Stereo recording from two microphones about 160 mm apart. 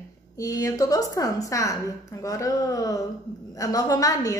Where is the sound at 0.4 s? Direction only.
20° left (ahead or behind).